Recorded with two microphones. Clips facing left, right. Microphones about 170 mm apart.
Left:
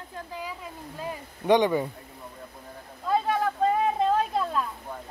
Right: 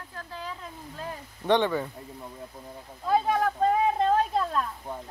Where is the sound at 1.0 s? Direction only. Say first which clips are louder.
Left 3 dB; 10° left (ahead or behind).